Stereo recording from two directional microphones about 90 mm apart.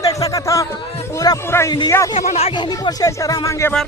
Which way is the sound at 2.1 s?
90° left.